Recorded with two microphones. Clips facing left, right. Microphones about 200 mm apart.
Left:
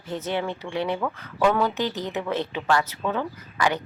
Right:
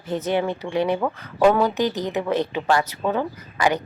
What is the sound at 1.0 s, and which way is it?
Speech, 40° right (ahead or behind).